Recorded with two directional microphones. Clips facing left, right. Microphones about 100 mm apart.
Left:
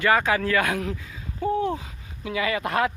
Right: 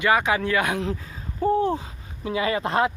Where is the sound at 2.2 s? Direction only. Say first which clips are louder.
Right 2 dB; 30° right (ahead or behind).